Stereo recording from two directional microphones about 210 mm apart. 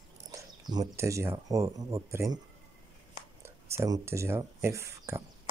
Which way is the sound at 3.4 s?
15° right (ahead or behind).